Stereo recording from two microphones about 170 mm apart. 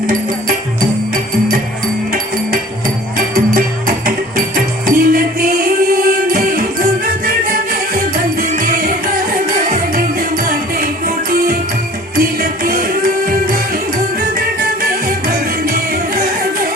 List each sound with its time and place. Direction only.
3.2 s music: 55° right (ahead or behind)